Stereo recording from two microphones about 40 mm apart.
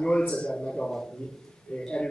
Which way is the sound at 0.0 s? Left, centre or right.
Left.